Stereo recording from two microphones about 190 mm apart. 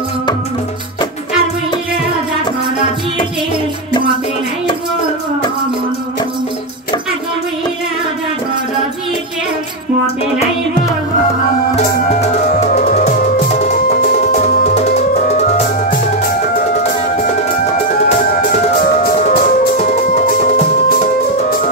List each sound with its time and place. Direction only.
11.7 s music: 35° left (ahead or behind)
15.9 s music: 50° left (ahead or behind)
18.3 s music: 50° left (ahead or behind)